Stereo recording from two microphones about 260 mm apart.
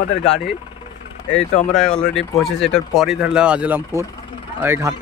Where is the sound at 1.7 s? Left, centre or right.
Centre.